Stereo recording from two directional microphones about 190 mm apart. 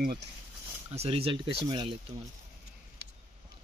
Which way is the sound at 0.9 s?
30° right (ahead or behind).